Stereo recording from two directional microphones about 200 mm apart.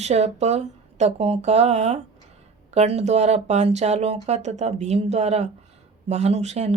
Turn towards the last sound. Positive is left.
turn(degrees=-35)  # may be behind; listen again after turning